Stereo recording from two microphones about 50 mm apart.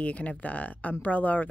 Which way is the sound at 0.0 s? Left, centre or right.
Left.